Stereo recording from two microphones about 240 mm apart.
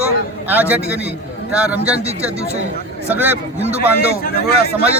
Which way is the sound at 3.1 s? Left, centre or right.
Centre.